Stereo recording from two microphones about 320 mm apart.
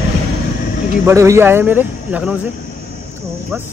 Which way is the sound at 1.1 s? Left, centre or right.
Centre.